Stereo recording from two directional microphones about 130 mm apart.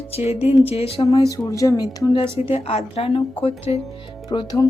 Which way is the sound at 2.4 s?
50° left (ahead or behind).